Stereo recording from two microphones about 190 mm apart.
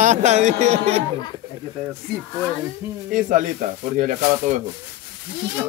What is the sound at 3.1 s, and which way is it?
Speech, 45° right (ahead or behind).